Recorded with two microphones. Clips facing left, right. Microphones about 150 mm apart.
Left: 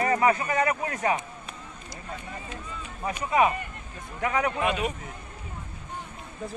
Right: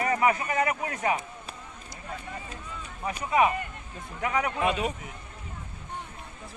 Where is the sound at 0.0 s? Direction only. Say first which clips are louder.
Left 2 dB; 15° right (ahead or behind).